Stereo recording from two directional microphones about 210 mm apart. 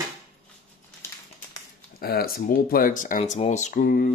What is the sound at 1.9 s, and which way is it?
Speech, 45° left (ahead or behind).